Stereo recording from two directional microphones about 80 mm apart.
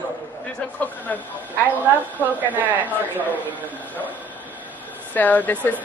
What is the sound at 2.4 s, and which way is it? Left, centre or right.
Speech, right.